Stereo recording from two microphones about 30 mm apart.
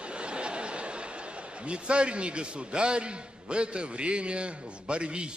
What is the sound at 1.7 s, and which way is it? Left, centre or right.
A man's voice, right.